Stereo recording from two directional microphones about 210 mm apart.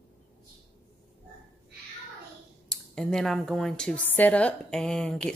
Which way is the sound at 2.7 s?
5° left (ahead or behind).